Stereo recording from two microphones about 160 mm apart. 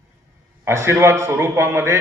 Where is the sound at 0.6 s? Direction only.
15° right (ahead or behind).